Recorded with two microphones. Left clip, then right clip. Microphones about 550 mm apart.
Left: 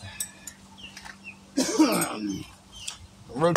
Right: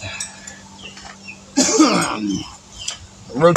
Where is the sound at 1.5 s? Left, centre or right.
Left.